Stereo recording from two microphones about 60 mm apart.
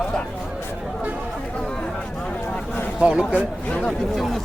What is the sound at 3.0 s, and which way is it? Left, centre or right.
Speech, centre.